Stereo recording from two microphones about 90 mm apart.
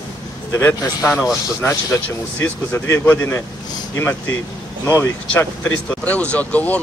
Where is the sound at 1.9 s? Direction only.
30° left (ahead or behind).